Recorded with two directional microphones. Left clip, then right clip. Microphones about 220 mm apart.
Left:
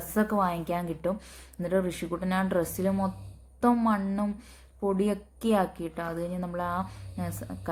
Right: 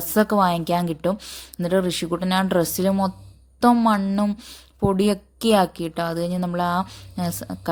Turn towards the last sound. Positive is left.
turn(degrees=-40)  # may be behind; listen again after turning